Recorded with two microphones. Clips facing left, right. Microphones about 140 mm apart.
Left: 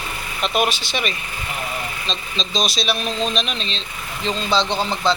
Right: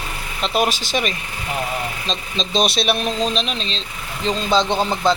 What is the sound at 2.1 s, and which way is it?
Speech, 55° right (ahead or behind).